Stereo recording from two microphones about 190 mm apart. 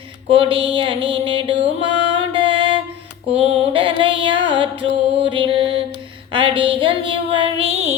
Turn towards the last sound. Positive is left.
turn(degrees=-30)  # may be behind; listen again after turning